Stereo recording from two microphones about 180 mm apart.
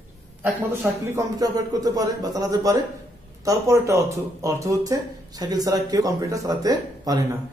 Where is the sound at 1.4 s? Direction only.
20° right (ahead or behind).